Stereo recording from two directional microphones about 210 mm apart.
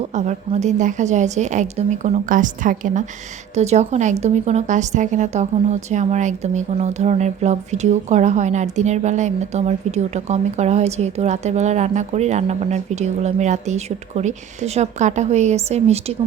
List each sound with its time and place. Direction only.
0.1 s a woman's voice: 35° right (ahead or behind)